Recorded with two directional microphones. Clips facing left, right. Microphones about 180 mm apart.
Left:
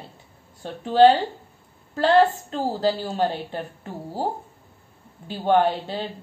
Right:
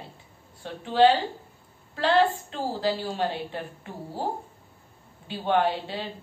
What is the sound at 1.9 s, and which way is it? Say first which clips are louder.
Speech: left 4 dB; 45° left (ahead or behind).